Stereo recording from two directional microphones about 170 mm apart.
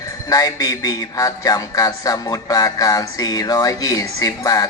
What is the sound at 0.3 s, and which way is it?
A man's voice, 20° left (ahead or behind).